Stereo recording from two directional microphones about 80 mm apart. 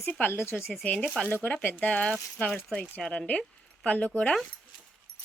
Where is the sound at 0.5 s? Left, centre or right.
Centre.